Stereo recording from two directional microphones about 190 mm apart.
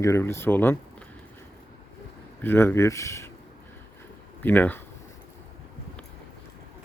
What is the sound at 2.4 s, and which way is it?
Speech, 10° left (ahead or behind).